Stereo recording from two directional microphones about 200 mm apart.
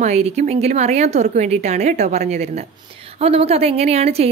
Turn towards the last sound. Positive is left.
turn(degrees=-30)  # may be behind; listen again after turning